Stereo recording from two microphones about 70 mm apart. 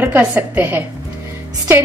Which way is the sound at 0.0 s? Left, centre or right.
Right.